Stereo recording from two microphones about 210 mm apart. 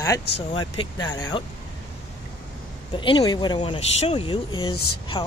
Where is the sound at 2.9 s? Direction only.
25° left (ahead or behind).